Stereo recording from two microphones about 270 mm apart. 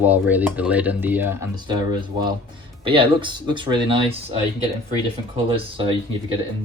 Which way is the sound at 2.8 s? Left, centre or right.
Centre.